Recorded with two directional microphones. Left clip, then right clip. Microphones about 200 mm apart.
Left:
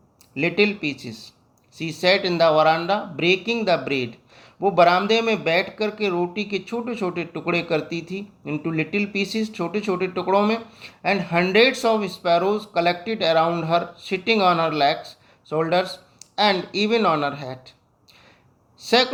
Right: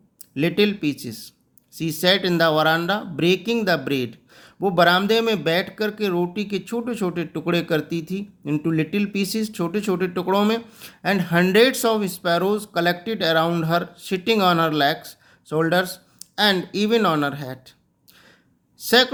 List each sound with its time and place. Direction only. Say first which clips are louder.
0.3 s speech: even; 40° right (ahead or behind)